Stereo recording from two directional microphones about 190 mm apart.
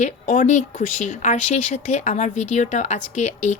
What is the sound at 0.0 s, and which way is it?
Speech, 40° left (ahead or behind).